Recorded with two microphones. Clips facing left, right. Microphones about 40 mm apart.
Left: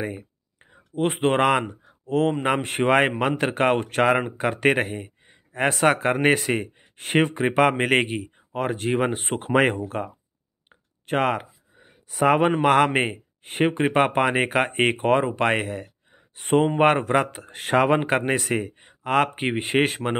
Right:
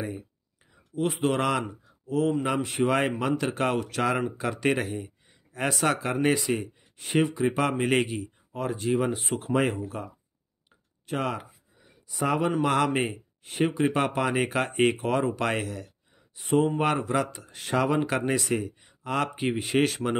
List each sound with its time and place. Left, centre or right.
0.0 s speech: left